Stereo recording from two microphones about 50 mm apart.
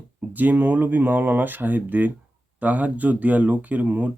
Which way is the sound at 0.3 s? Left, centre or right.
Right.